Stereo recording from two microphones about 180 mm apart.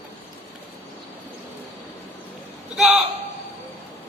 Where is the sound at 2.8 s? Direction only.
Centre (ahead or behind).